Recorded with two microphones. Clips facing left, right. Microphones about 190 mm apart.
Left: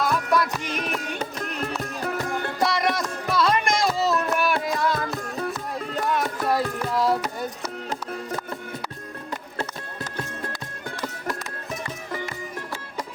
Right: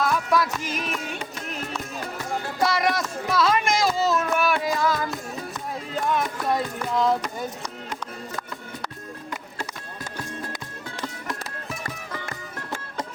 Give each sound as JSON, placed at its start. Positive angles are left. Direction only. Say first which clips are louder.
{"t": 0.0, "sound": "music", "louder": "even", "side_deg": 0}
{"t": 0.9, "sound": "music", "louder": "left 2 dB", "side_deg": 40}
{"t": 2.6, "sound": "a sound", "louder": "right 1 dB", "side_deg": 0}
{"t": 5.0, "sound": "music", "louder": "left 3 dB", "side_deg": 60}
{"t": 5.9, "sound": "music", "louder": "right 1 dB", "side_deg": 0}